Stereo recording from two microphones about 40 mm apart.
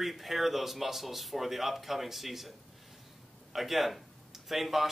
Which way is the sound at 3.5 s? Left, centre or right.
Centre.